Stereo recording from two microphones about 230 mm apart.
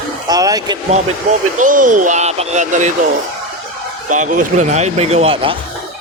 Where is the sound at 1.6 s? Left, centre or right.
Right.